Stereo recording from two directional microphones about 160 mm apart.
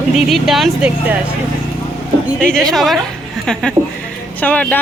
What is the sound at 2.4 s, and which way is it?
Speech, 5° left (ahead or behind).